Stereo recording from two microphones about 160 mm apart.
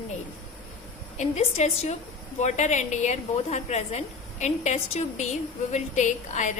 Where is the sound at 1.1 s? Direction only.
45° left (ahead or behind).